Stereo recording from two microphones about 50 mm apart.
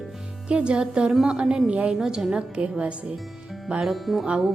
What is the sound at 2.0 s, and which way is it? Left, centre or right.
Speech, centre.